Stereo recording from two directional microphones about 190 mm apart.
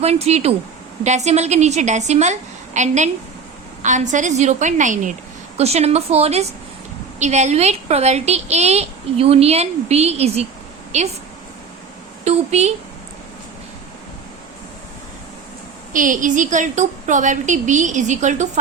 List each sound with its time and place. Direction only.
0.0 s a woman's voice: 35° right (ahead or behind)
12.2 s a woman's voice: 35° right (ahead or behind)
15.9 s a woman's voice: 45° right (ahead or behind)